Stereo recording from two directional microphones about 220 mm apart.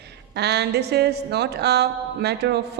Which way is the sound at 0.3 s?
50° right (ahead or behind).